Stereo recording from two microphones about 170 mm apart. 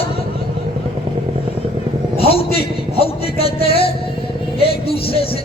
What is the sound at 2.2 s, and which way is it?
A man's voice, 35° left (ahead or behind).